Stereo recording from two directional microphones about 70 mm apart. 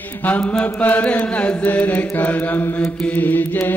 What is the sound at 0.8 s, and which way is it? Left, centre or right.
Mantra, left.